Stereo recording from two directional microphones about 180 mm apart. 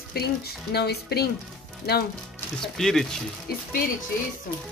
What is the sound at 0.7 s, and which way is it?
Speech, 65° left (ahead or behind).